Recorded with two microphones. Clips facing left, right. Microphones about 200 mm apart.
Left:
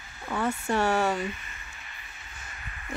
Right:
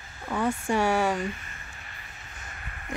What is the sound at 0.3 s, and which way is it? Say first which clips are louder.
Speech: right 1 dB; 15° right (ahead or behind).